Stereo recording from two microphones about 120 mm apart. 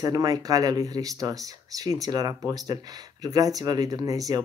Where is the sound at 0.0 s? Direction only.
30° right (ahead or behind).